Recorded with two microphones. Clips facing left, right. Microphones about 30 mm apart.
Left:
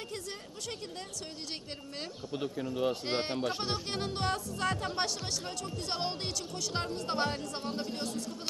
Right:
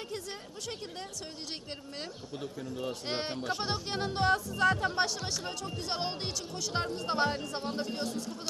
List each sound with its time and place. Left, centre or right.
2.3 s speech: left
3.1 s speech: centre